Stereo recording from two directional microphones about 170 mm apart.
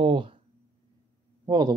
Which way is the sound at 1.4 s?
25° right (ahead or behind).